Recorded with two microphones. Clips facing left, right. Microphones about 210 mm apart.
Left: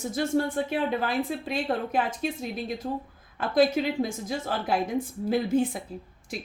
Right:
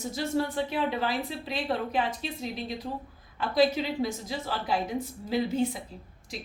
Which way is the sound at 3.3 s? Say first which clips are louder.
Left 2 dB; 50° left (ahead or behind).